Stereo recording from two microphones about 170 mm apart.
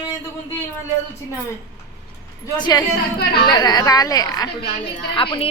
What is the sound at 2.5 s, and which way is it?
A woman's voice, 25° left (ahead or behind).